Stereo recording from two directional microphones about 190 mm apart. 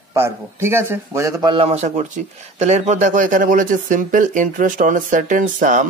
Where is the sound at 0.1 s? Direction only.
15° right (ahead or behind).